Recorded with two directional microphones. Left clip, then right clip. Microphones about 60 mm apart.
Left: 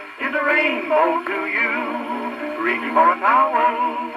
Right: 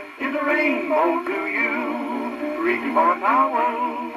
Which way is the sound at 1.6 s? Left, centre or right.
Centre.